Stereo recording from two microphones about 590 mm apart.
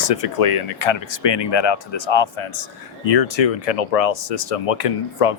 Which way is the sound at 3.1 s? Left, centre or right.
Left.